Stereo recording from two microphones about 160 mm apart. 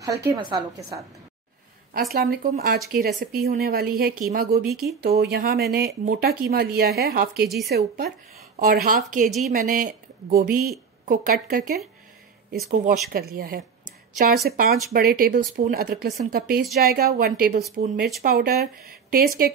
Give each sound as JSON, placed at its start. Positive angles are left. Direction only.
{"t": 0.3, "sound": "a woman's voice", "side_deg": -25}
{"t": 2.1, "sound": "speech", "side_deg": -70}
{"t": 5.0, "sound": "speech", "side_deg": -80}
{"t": 8.5, "sound": "a woman's voice", "side_deg": -60}